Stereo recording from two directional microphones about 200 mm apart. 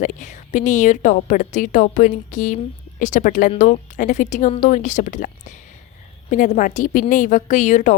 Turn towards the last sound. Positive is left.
turn(degrees=35)  # may be behind; listen again after turning